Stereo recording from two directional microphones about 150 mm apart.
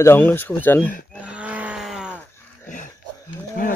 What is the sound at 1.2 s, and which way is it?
Cattle, 10° right (ahead or behind).